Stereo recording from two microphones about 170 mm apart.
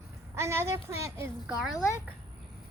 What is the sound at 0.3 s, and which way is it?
Speech, 15° right (ahead or behind).